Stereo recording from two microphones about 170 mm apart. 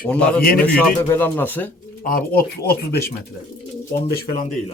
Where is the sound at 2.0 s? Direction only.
55° left (ahead or behind).